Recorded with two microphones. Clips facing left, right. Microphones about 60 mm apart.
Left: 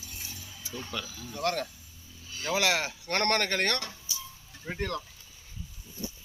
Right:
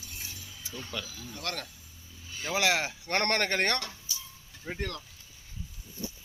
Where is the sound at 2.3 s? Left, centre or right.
Centre; by 3.8 s right.